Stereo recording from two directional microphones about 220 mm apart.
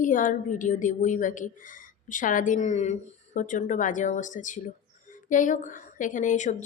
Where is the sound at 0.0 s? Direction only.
35° left (ahead or behind).